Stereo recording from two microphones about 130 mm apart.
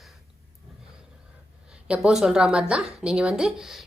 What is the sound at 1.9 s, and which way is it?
Speech, 5° right (ahead or behind).